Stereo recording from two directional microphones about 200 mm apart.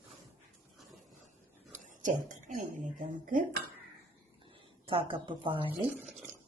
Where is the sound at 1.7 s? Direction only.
40° right (ahead or behind).